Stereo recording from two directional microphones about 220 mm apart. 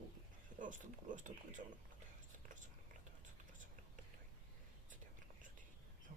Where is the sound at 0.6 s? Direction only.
35° right (ahead or behind).